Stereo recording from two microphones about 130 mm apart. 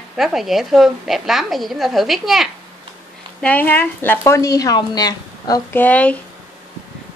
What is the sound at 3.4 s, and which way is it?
A woman's voice, 10° left (ahead or behind).